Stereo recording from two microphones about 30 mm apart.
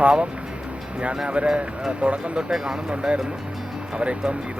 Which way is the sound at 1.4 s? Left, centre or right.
Right.